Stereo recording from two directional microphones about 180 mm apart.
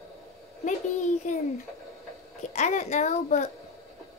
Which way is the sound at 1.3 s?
40° left (ahead or behind).